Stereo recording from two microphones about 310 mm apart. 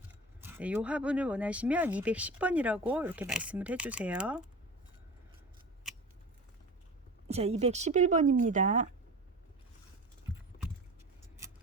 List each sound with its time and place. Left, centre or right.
0.1 s speech: centre
5.8 s scissors: centre
7.3 s speech: centre